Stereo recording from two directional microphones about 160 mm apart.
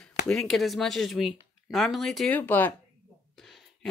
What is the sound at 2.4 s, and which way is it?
Speech, 15° left (ahead or behind).